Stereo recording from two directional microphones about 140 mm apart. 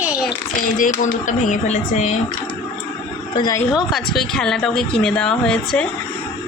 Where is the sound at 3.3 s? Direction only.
25° left (ahead or behind).